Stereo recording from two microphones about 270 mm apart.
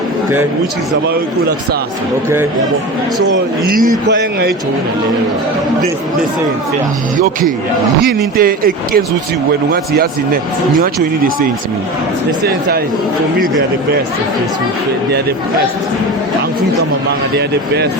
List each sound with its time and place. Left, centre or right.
4.1 s speech: right
8.4 s speech: right